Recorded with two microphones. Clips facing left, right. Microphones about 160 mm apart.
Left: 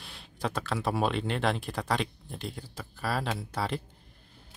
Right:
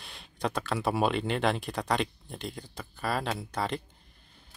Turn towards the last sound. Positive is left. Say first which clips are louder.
# even
turn(degrees=5)  # may be behind; listen again after turning